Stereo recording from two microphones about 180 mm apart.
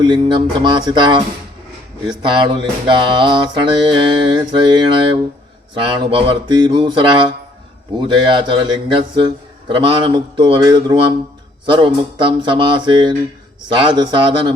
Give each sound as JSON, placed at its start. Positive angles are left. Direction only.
{"t": 0.0, "sound": "a man's voice", "side_deg": -25}